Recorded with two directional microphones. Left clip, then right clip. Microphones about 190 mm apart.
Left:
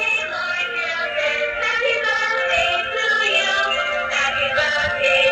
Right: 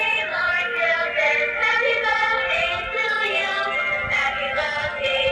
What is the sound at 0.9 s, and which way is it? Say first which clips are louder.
Music: right 1 dB; 15° left (ahead or behind).